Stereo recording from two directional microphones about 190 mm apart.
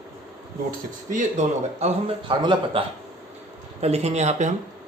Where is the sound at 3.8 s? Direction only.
35° right (ahead or behind).